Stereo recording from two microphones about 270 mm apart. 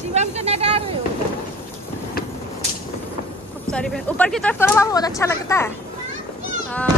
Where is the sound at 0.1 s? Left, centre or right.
Right.